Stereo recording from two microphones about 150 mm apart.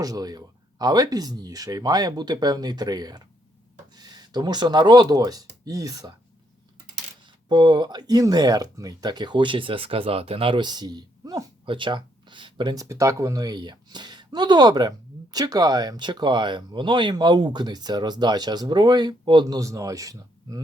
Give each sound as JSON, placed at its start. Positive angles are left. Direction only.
{"t": 0.0, "sound": "speech", "side_deg": -25}
{"t": 7.4, "sound": "speech", "side_deg": -30}